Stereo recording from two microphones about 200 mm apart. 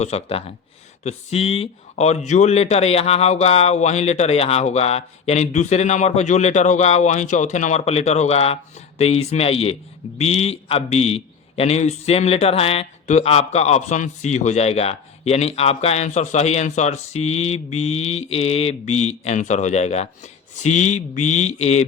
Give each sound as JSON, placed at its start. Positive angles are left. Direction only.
{"t": 0.0, "sound": "a man's voice", "side_deg": 30}